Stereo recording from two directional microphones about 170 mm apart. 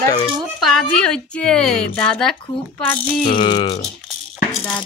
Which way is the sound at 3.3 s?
30° left (ahead or behind).